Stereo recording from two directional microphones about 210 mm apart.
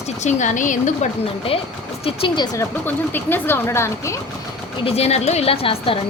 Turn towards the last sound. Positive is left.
turn(degrees=25)  # may be behind; listen again after turning